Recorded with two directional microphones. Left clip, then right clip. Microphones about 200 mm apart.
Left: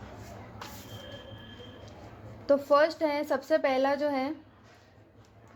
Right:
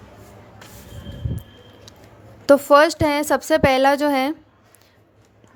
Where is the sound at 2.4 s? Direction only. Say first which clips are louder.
Right 11 dB; 40° right (ahead or behind).